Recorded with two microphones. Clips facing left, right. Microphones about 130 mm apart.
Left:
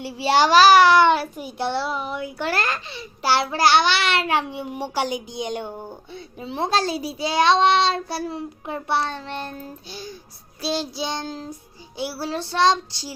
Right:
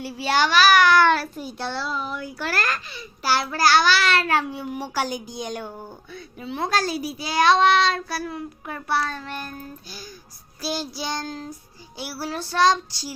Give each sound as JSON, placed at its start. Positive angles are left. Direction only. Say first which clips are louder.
{"t": 0.0, "sound": "a child's voice", "louder": "left 3 dB", "side_deg": 25}